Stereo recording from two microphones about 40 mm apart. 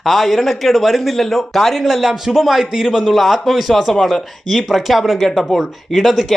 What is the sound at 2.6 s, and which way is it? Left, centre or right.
Speech, centre.